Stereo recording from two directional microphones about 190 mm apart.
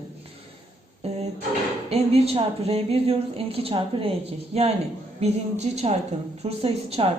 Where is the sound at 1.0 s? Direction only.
35° right (ahead or behind).